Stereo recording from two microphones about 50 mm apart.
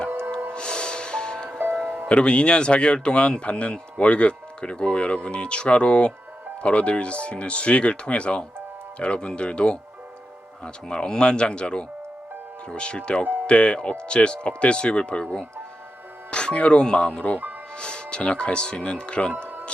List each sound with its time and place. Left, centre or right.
0.5 s snort: centre
2.0 s speech: left
13.2 s music: right
13.5 s speech: left
19.3 s music: right